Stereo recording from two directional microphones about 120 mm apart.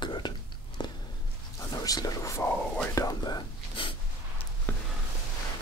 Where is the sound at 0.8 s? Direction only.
40° left (ahead or behind).